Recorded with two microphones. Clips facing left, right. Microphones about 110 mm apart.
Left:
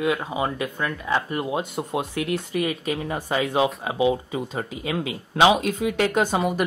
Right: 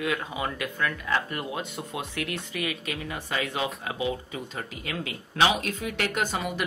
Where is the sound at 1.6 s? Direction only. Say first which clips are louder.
Left 7 dB; 35° left (ahead or behind).